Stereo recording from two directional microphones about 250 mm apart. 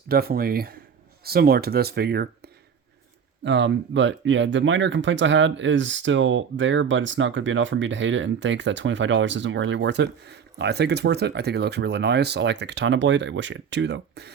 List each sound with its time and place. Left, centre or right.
0.1 s speech: right